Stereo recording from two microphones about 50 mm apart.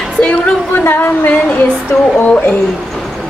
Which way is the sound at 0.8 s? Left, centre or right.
Left.